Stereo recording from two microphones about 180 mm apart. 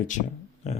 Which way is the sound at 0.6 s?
40° left (ahead or behind).